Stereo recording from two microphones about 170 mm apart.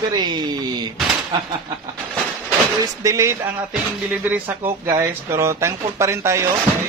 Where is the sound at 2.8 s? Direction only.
20° right (ahead or behind).